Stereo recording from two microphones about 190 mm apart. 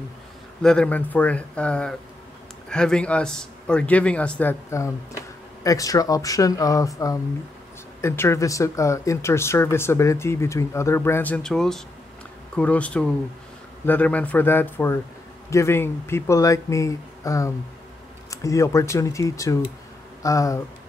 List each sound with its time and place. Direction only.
0.6 s speech: 5° left (ahead or behind)
8.0 s speech: 15° left (ahead or behind)